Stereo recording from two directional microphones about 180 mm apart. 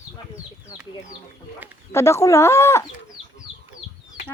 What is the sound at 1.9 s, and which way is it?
Speech, 15° left (ahead or behind).